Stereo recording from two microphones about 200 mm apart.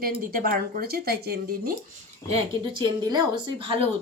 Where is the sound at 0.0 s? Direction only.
50° right (ahead or behind).